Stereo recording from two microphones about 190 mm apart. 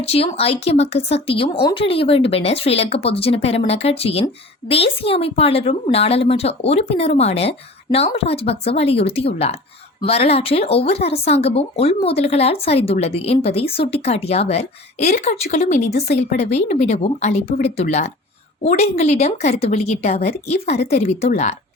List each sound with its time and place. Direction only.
0.0 s speech: 30° left (ahead or behind)